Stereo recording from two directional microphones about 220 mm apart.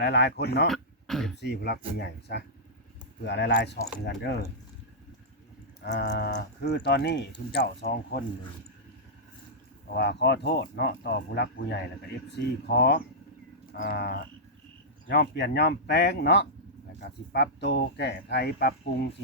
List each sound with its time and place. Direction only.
0.0 s speech: 50° left (ahead or behind)
0.7 s throat clearing: centre (ahead or behind)
1.4 s speech: 50° left (ahead or behind)
5.8 s speech: 50° left (ahead or behind)
9.9 s speech: 50° left (ahead or behind)